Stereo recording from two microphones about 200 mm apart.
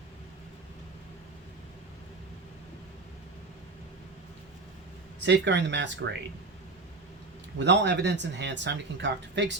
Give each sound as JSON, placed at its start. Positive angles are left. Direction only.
{"t": 5.2, "sound": "speech", "side_deg": -60}
{"t": 7.6, "sound": "speech", "side_deg": -60}